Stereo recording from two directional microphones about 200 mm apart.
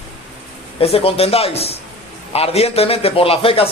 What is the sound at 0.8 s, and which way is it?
A man's voice, 30° left (ahead or behind).